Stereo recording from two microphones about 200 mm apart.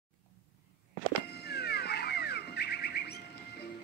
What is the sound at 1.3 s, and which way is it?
Music, 55° left (ahead or behind).